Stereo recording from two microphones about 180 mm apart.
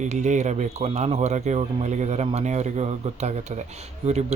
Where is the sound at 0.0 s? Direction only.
40° right (ahead or behind).